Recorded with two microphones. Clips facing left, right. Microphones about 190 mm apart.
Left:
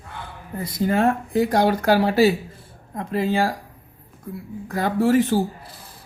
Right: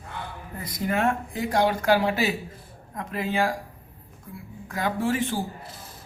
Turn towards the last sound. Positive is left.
turn(degrees=40)  # may be behind; listen again after turning